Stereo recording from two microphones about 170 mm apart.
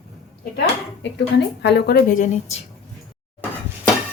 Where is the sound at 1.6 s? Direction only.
75° left (ahead or behind); by 2.6 s 50° left (ahead or behind).